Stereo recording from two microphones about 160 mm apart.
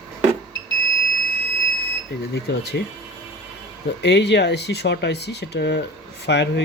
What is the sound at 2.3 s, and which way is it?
Speech, 90° left.